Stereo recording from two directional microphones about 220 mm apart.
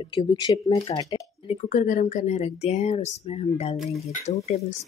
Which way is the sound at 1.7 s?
35° left (ahead or behind).